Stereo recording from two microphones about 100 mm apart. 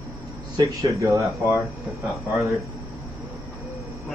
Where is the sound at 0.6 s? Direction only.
30° right (ahead or behind).